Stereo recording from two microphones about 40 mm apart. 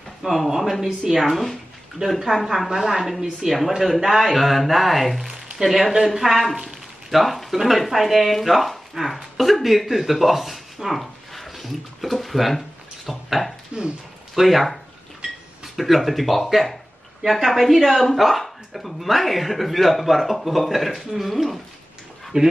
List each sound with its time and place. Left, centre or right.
0.2 s a woman's voice: centre
13.7 s speech: right
14.3 s speech: centre
22.3 s speech: right